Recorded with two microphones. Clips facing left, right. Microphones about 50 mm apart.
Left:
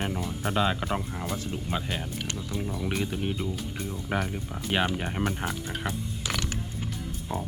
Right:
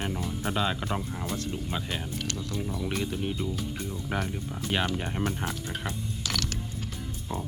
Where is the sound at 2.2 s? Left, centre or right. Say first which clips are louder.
Even; left.